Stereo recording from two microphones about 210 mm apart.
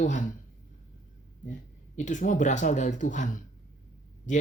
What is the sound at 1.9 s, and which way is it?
Speech, 35° left (ahead or behind).